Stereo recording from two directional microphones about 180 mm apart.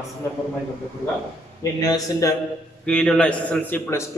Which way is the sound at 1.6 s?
20° left (ahead or behind).